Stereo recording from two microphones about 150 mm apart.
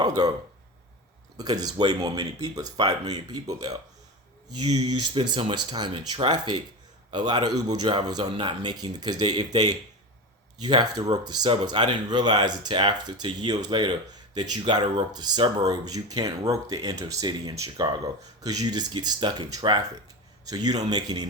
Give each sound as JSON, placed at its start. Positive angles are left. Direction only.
{"t": 0.2, "sound": "speech", "side_deg": -30}
{"t": 1.4, "sound": "speech", "side_deg": -25}